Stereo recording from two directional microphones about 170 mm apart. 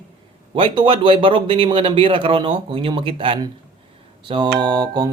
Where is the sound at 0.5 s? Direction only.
30° right (ahead or behind).